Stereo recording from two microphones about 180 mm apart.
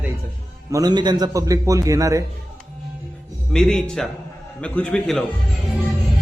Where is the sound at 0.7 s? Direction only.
20° right (ahead or behind).